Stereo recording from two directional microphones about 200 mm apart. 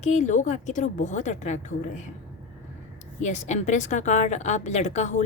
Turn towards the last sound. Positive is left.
turn(degrees=35)  # may be behind; listen again after turning